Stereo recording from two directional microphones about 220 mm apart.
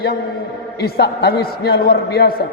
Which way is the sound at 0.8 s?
45° left (ahead or behind).